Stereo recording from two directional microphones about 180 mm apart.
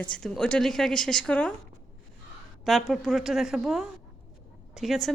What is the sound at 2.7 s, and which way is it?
A woman's voice, centre (ahead or behind).